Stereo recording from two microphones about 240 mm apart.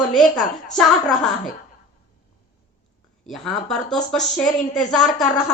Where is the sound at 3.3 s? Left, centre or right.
Centre.